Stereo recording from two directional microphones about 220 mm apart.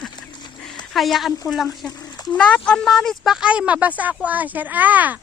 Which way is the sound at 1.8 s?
20° left (ahead or behind).